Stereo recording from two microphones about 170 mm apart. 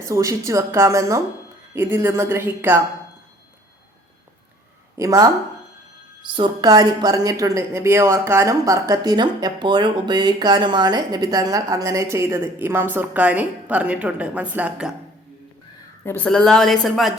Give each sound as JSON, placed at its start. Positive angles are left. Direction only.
{"t": 0.0, "sound": "a woman's voice", "side_deg": -20}
{"t": 4.9, "sound": "speech", "side_deg": -20}
{"t": 6.3, "sound": "a woman's voice", "side_deg": -25}
{"t": 16.0, "sound": "a woman's voice", "side_deg": 10}